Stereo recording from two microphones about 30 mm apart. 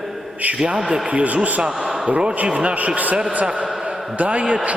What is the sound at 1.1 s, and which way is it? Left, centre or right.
Speech, right.